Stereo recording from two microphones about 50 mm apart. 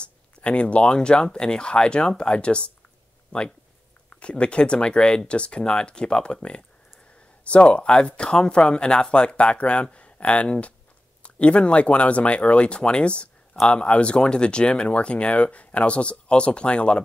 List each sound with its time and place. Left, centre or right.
0.0 s speech: left
4.1 s speech: left